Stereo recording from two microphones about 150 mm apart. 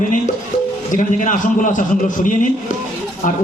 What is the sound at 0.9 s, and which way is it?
Speech, 60° left (ahead or behind).